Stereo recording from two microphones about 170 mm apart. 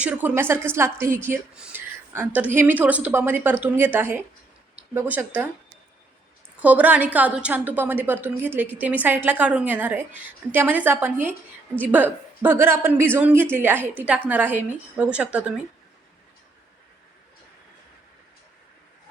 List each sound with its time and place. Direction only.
0.0 s speech: 10° right (ahead or behind)
6.6 s speech: 10° right (ahead or behind)